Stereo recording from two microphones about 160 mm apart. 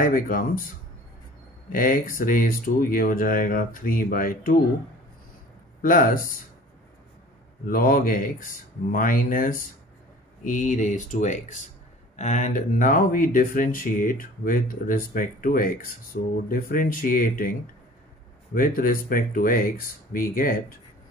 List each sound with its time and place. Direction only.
0.0 s speech: 60° left (ahead or behind)
1.7 s speech: 60° left (ahead or behind)
5.8 s speech: 60° left (ahead or behind)
7.6 s speech: 60° left (ahead or behind)
18.5 s speech: 60° left (ahead or behind)